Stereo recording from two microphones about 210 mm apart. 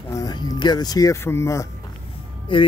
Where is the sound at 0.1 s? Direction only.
15° left (ahead or behind).